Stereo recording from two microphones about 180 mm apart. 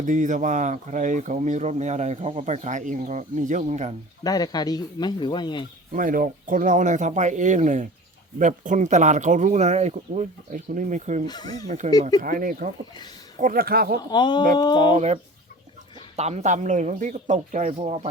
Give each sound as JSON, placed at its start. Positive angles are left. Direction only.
{"t": 0.0, "sound": "speech", "side_deg": -45}
{"t": 4.2, "sound": "speech", "side_deg": 20}
{"t": 5.9, "sound": "a man's voice", "side_deg": -50}
{"t": 11.3, "sound": "speech", "side_deg": 20}
{"t": 11.8, "sound": "a man's voice", "side_deg": -40}
{"t": 14.1, "sound": "speech", "side_deg": 25}
{"t": 14.9, "sound": "a man's voice", "side_deg": -40}